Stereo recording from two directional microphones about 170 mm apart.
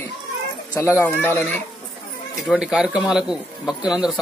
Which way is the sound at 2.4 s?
5° right (ahead or behind).